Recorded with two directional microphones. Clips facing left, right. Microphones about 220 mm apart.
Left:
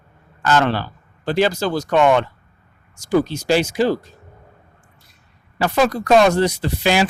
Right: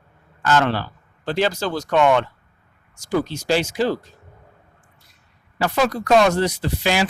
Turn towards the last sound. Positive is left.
turn(degrees=25)  # may be behind; listen again after turning